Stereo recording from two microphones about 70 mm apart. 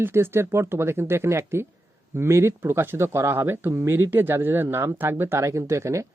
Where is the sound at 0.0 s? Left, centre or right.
Right.